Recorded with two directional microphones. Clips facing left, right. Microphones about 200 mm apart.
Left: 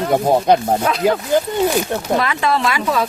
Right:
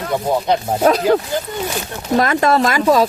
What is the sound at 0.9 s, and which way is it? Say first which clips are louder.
Speech: right 5 dB; 40° right (ahead or behind).